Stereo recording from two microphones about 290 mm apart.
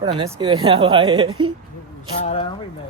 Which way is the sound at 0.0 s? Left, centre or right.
Centre.